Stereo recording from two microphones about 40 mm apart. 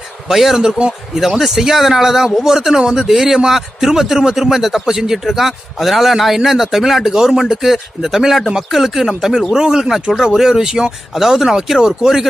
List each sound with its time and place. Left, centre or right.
0.3 s a man's voice: centre
0.7 s a man's voice: right
1.1 s a man's voice: centre